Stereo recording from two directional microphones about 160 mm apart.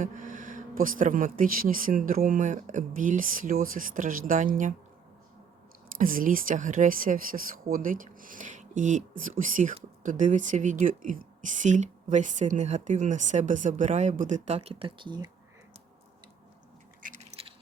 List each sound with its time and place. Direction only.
0.0 s speech: 55° right (ahead or behind)
5.9 s speech: 60° right (ahead or behind); by 15.3 s 30° right (ahead or behind)
17.0 s squish: 55° right (ahead or behind)